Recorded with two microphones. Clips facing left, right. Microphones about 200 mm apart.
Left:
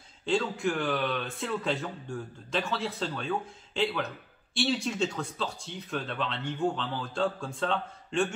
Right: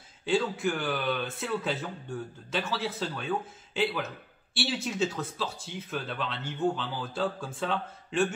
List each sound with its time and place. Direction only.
0.2 s speech: centre (ahead or behind)